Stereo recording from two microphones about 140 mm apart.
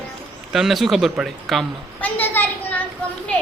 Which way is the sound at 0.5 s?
Centre (ahead or behind).